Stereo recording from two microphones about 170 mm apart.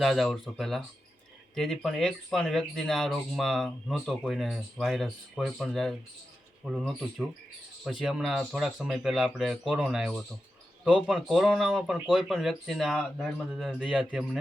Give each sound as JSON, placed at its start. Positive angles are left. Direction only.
{"t": 0.0, "sound": "speech", "side_deg": 0}